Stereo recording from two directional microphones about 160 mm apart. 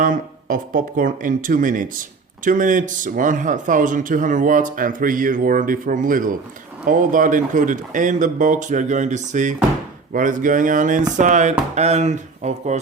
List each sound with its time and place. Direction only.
0.0 s speech: 55° right (ahead or behind)